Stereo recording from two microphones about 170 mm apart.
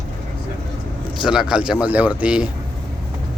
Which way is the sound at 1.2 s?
5° right (ahead or behind).